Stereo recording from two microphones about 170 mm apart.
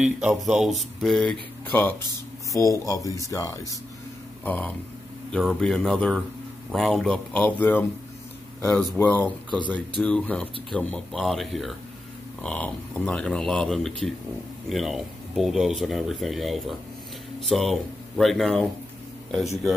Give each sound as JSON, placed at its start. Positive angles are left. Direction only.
{"t": 0.0, "sound": "speech", "side_deg": 0}
{"t": 4.5, "sound": "speech", "side_deg": 10}